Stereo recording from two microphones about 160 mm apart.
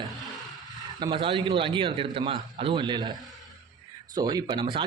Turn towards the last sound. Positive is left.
turn(degrees=-30)  # may be behind; listen again after turning